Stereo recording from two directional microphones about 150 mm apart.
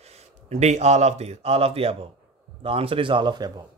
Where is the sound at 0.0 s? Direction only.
50° right (ahead or behind).